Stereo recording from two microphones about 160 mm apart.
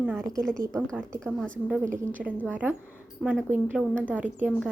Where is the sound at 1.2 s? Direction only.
5° right (ahead or behind).